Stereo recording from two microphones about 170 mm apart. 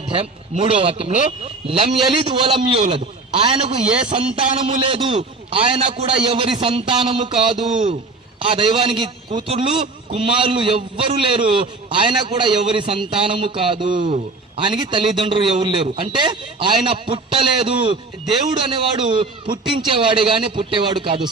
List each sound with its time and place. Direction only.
0.1 s a man's voice: 35° right (ahead or behind)
2.0 s a man's voice: 25° right (ahead or behind)